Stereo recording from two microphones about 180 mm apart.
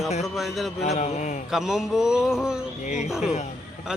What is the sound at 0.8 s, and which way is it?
Mantra, 40° left (ahead or behind).